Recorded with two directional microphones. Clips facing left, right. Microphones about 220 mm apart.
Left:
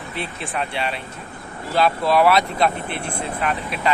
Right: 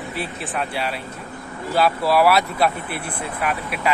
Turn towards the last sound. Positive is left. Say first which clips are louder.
# even
turn(degrees=-5)  # may be behind; listen again after turning